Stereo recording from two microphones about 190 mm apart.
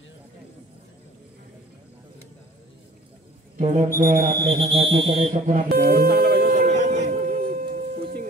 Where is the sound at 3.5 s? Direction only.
35° right (ahead or behind).